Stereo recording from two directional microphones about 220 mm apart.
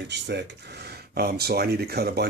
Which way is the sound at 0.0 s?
50° right (ahead or behind).